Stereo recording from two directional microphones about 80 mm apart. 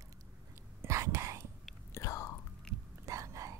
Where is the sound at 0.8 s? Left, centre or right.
Right.